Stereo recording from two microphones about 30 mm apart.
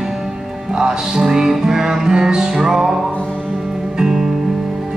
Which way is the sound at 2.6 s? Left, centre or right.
Centre.